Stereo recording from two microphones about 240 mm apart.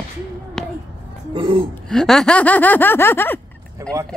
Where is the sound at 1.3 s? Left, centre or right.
Right.